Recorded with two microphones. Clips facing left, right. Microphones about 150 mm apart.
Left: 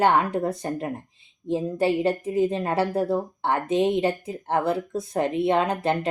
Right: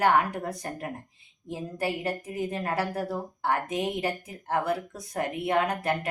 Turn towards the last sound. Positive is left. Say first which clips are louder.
# left 4 dB
turn(degrees=25)  # may be behind; listen again after turning